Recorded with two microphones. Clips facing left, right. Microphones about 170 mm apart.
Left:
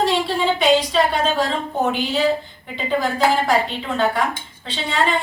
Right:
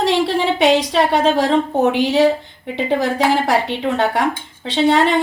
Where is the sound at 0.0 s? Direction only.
75° right (ahead or behind).